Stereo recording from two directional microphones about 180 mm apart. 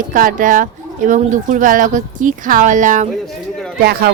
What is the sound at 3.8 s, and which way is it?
Speech, 55° right (ahead or behind).